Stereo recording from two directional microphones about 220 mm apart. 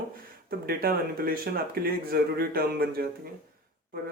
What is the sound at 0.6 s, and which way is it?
Speech, 45° right (ahead or behind).